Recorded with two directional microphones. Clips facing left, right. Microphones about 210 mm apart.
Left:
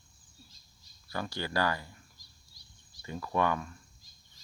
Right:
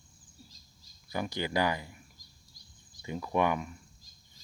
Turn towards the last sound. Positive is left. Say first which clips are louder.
# right 1 dB
turn(degrees=-15)  # may be behind; listen again after turning